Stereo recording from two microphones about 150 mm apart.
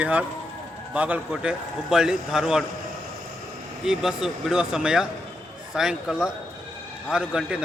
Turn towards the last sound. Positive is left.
turn(degrees=-5)  # may be behind; listen again after turning